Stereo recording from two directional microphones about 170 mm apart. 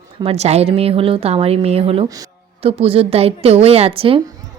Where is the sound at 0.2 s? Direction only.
35° right (ahead or behind).